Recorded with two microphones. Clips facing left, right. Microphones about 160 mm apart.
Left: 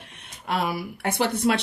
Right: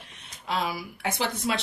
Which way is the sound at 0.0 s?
55° left (ahead or behind).